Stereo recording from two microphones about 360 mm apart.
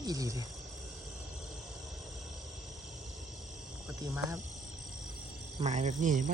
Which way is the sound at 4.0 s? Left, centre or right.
Centre.